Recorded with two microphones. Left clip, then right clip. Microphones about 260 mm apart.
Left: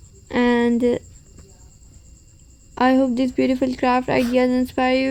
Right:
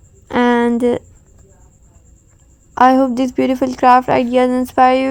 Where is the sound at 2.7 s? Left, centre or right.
Right.